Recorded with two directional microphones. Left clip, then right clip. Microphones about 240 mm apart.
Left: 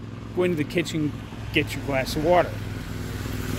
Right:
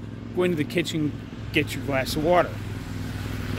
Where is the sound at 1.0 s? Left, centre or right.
Left.